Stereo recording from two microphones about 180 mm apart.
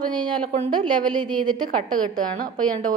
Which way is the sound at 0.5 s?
40° right (ahead or behind).